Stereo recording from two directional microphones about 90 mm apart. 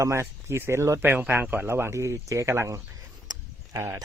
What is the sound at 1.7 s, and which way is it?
Speech, 30° right (ahead or behind).